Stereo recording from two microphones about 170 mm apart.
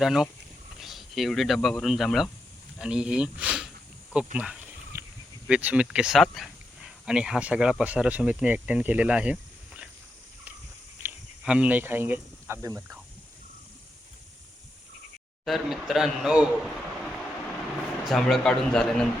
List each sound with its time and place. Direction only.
0.0 s speech: centre (ahead or behind)
4.9 s a sound: 15° right (ahead or behind)
5.5 s speech: 5° right (ahead or behind)
11.0 s speech: 5° right (ahead or behind)
15.4 s a man's voice: centre (ahead or behind)